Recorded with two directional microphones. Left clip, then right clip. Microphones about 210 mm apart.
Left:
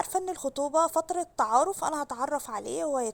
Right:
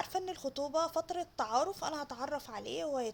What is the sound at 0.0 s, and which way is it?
Speech, 30° left (ahead or behind).